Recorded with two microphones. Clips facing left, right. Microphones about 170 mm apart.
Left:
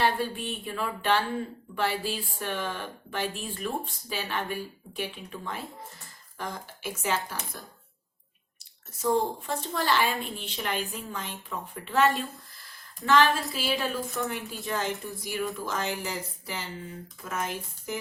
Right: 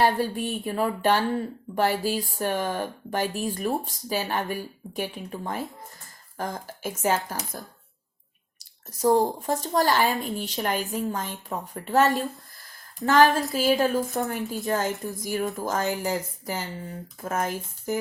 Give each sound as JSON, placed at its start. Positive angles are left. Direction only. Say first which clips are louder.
{"t": 0.0, "sound": "speech", "louder": "right 4 dB", "side_deg": -40}
{"t": 8.5, "sound": "speech", "louder": "right 5 dB", "side_deg": -40}